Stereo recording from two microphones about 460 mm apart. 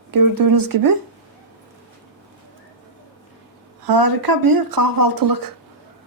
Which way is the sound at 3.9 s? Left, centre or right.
Right.